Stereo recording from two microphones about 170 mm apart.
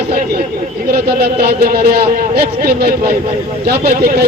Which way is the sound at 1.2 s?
70° right (ahead or behind).